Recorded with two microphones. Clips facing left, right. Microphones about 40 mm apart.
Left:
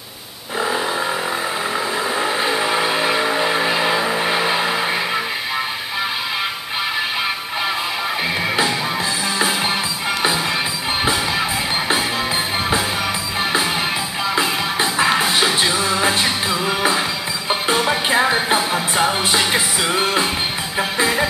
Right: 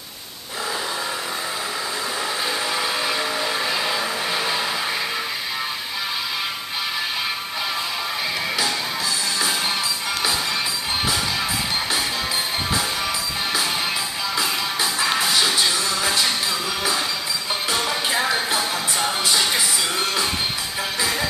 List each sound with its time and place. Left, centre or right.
2.1 s vehicle: left
14.3 s music: left